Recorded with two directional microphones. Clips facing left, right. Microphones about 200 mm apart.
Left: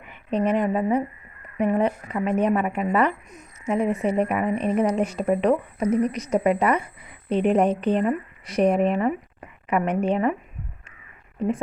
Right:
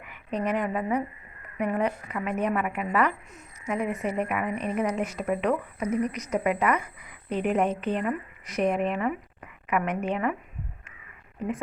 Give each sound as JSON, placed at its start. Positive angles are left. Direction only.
{"t": 0.0, "sound": "a woman's voice", "side_deg": 30}